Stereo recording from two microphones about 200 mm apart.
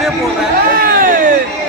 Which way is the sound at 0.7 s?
45° right (ahead or behind).